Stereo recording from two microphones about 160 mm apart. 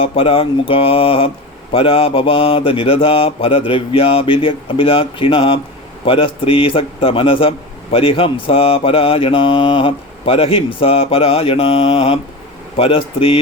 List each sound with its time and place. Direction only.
0.0 s a man's voice: 35° left (ahead or behind)